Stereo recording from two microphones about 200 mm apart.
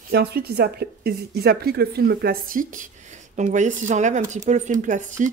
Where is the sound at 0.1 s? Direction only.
55° right (ahead or behind).